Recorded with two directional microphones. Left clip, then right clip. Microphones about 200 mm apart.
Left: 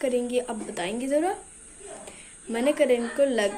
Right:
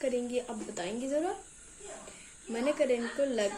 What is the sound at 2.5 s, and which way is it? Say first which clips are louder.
Speech: left 7 dB; centre (ahead or behind).